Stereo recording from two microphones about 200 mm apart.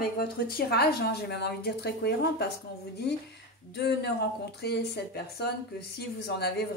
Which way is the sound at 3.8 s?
55° left (ahead or behind).